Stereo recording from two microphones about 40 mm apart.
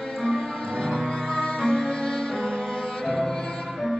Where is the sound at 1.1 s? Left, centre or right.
Left.